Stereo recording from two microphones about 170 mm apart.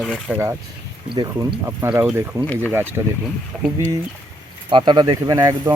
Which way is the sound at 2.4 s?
10° left (ahead or behind).